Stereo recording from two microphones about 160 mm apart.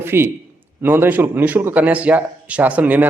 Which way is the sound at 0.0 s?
15° right (ahead or behind).